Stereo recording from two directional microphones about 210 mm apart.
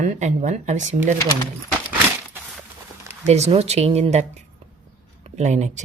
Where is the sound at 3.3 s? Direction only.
30° right (ahead or behind).